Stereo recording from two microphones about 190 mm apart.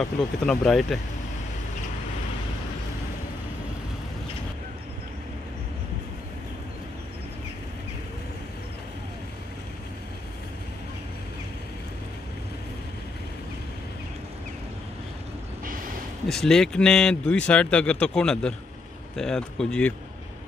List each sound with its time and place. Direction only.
0.0 s speech: centre (ahead or behind)
16.3 s speech: 5° left (ahead or behind)